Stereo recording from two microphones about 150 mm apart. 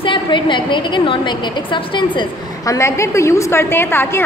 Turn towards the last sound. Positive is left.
turn(degrees=15)  # may be behind; listen again after turning